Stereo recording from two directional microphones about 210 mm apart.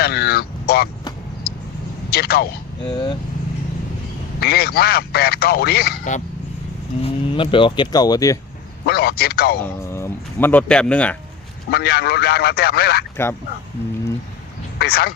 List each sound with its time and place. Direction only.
0.0 s speech: 50° left (ahead or behind)
1.5 s vehicle: 50° left (ahead or behind)
2.0 s a man's voice: 50° left (ahead or behind)
2.8 s speech: 20° left (ahead or behind)
4.4 s a man's voice: 50° left (ahead or behind)
7.0 s speech: 25° left (ahead or behind)
8.8 s a man's voice: 50° left (ahead or behind)
9.6 s speech: 10° left (ahead or behind)
11.7 s a man's voice: 50° left (ahead or behind)
14.8 s a man's voice: 50° left (ahead or behind)